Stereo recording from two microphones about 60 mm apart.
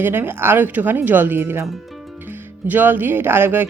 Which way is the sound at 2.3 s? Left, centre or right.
Right.